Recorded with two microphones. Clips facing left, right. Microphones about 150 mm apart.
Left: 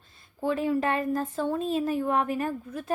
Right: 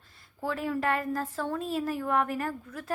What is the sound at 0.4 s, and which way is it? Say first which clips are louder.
Speech: left 4 dB; 20° left (ahead or behind).